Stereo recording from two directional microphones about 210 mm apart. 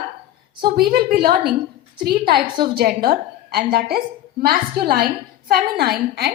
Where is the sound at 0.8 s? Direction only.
45° right (ahead or behind).